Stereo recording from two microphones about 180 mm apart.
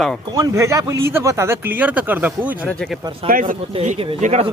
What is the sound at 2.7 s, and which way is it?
Speech, 5° left (ahead or behind).